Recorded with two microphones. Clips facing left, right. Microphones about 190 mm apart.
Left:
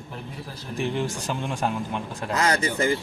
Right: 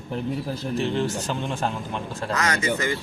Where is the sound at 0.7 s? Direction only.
15° left (ahead or behind).